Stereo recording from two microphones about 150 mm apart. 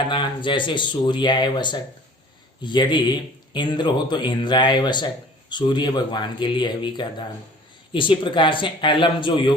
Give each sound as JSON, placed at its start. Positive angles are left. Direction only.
{"t": 0.1, "sound": "speech", "side_deg": 30}